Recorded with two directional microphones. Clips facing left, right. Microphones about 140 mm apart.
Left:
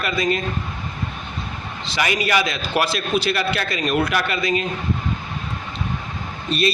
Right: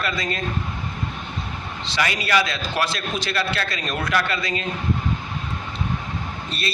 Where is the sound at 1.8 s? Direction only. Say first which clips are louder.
Left 3 dB; 15° left (ahead or behind).